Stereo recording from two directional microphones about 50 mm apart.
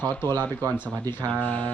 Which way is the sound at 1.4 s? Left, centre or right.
Left.